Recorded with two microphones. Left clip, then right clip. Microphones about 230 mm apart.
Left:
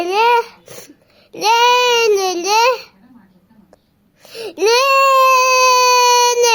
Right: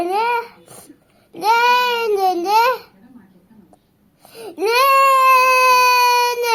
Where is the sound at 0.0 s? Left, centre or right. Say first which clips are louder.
Left 5 dB; left.